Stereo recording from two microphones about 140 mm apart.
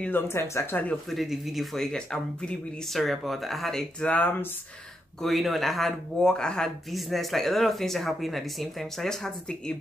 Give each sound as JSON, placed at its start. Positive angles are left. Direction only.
{"t": 0.0, "sound": "speech", "side_deg": 15}
{"t": 1.1, "sound": "speech", "side_deg": 0}
{"t": 5.2, "sound": "speech", "side_deg": 0}